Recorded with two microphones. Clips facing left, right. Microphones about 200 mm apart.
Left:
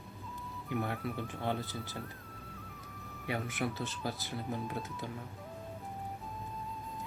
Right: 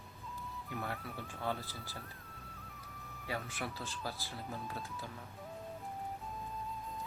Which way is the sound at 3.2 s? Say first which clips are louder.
Left 5 dB; 20° left (ahead or behind).